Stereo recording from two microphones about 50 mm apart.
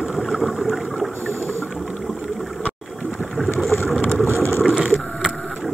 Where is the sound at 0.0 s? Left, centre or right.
Centre.